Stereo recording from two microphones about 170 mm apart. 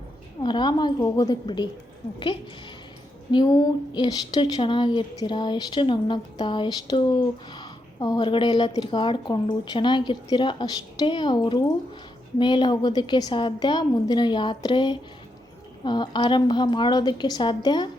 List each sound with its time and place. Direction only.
0.4 s a woman's voice: 25° left (ahead or behind)
3.9 s a woman's voice: 25° left (ahead or behind)